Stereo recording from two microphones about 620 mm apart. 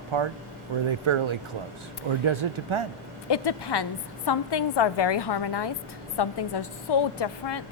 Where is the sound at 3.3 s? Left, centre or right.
Left.